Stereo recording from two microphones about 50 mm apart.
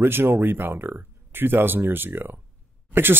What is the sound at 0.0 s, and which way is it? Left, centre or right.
Speech, right.